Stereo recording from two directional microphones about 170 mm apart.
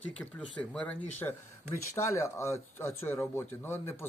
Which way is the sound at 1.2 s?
20° left (ahead or behind).